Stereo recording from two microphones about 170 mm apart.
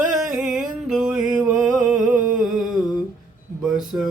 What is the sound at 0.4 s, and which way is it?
Music, 5° right (ahead or behind).